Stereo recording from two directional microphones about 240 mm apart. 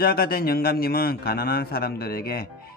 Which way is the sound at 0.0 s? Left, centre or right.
Left.